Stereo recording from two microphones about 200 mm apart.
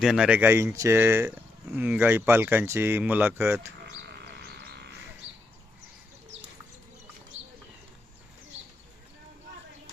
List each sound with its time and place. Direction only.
0.0 s speech: 5° right (ahead or behind)
3.8 s sheep: 55° right (ahead or behind)
7.3 s bird: 35° right (ahead or behind)